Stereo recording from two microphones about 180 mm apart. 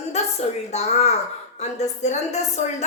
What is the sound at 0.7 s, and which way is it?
A woman's voice, 40° left (ahead or behind).